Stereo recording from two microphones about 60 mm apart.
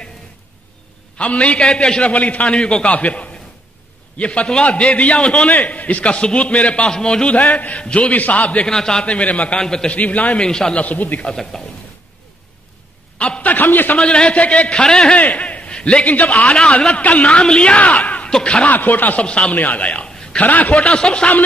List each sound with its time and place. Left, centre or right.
1.1 s a man's voice: left
8.6 s a man's voice: centre
9.0 s a man's voice: left
9.6 s a man's voice: centre
9.9 s a man's voice: left
10.8 s a man's voice: left
11.2 s a man's voice: centre
13.4 s a man's voice: left
13.9 s a man's voice: centre
15.1 s a man's voice: left
18.7 s a man's voice: left
19.2 s a man's voice: centre
19.5 s a man's voice: left